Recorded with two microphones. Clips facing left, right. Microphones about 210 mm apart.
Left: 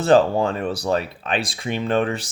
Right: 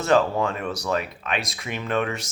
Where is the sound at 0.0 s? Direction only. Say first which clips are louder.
Left 4 dB; 30° left (ahead or behind).